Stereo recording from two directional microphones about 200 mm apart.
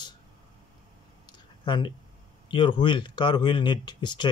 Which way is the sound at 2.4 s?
25° left (ahead or behind).